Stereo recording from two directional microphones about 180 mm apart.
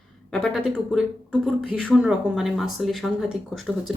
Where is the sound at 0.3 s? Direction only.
Centre (ahead or behind).